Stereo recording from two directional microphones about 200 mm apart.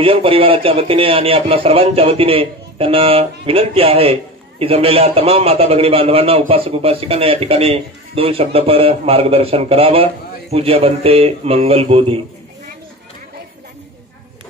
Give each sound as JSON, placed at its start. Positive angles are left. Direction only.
{"t": 0.0, "sound": "a man's voice", "side_deg": -25}